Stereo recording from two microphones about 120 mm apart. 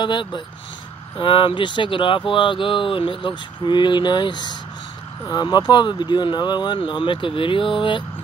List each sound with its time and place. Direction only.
0.0 s speech: 40° left (ahead or behind)